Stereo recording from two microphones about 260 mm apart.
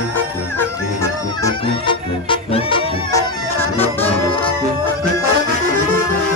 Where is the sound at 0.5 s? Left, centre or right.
Centre.